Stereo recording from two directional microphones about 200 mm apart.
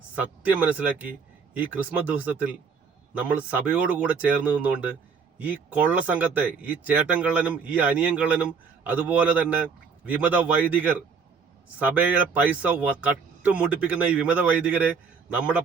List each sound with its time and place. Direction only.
0.2 s speech: 5° right (ahead or behind)
11.9 s speech: 5° right (ahead or behind)